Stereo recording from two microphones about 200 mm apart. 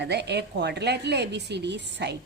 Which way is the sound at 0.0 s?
55° right (ahead or behind).